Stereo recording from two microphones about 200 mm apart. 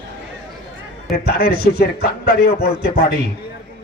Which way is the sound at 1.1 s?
50° left (ahead or behind).